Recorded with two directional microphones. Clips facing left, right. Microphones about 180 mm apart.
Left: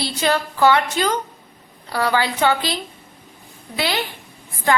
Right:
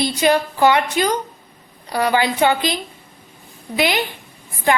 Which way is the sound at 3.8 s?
15° right (ahead or behind).